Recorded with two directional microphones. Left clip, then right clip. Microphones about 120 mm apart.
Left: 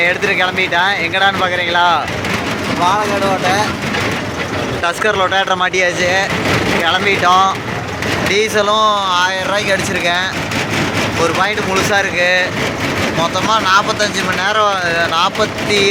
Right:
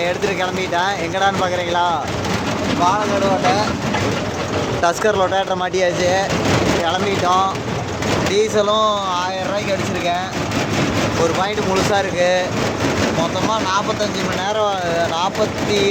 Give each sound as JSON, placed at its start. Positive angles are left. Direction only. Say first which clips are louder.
{"t": 0.0, "sound": "speech", "louder": "left 6 dB", "side_deg": -15}
{"t": 5.0, "sound": "speech", "louder": "left 3 dB", "side_deg": -20}
{"t": 11.3, "sound": "speech", "louder": "left 4 dB", "side_deg": -20}
{"t": 13.5, "sound": "speech", "louder": "left 6 dB", "side_deg": 0}